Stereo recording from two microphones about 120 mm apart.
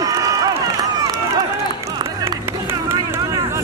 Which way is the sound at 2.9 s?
25° right (ahead or behind).